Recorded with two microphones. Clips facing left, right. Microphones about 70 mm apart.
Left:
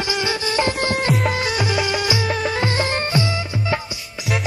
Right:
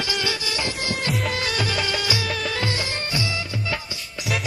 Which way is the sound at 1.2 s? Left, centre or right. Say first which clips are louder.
Left 4 dB; centre.